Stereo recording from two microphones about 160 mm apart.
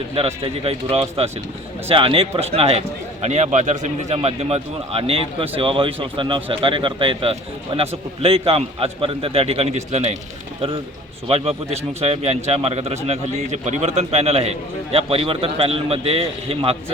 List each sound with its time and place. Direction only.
0.1 s a man's voice: 35° right (ahead or behind)
11.3 s a man's voice: 40° right (ahead or behind)